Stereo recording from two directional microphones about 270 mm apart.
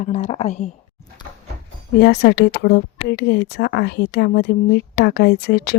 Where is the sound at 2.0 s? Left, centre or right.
Left.